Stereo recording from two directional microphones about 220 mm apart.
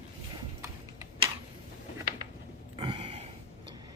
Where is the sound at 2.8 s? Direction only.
25° right (ahead or behind).